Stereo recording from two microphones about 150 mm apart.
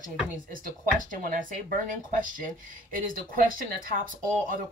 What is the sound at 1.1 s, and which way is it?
Speech, 65° right (ahead or behind).